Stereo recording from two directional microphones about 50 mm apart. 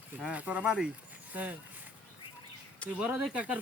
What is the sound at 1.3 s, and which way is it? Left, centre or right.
Speech, right.